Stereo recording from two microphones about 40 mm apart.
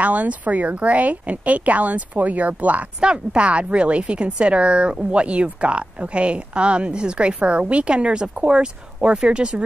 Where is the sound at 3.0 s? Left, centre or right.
Right.